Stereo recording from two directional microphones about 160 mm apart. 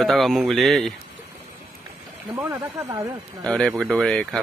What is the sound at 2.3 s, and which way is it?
Speech, 20° right (ahead or behind).